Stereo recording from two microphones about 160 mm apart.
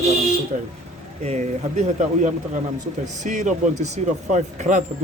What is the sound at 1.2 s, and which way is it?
A man's voice, 45° right (ahead or behind).